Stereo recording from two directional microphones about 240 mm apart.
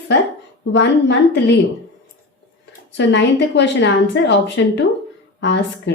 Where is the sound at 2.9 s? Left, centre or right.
Left.